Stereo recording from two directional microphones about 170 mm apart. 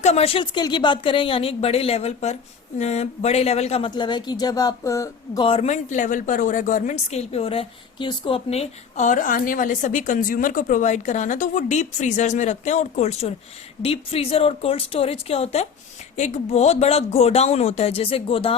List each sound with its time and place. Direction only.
0.0 s a woman's voice: 40° left (ahead or behind); by 5.5 s 20° left (ahead or behind)
5.5 s a woman's voice: 40° left (ahead or behind)